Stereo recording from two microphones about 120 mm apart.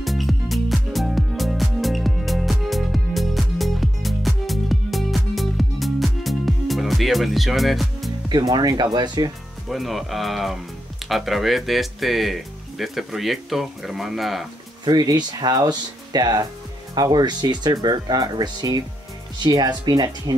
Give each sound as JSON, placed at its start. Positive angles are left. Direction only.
{"t": 0.0, "sound": "music", "side_deg": 0}
{"t": 8.3, "sound": "speech", "side_deg": -35}
{"t": 9.7, "sound": "speech", "side_deg": 0}
{"t": 14.9, "sound": "speech", "side_deg": -35}